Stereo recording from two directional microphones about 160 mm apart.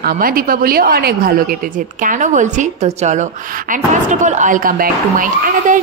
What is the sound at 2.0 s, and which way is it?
A woman's voice, 55° right (ahead or behind).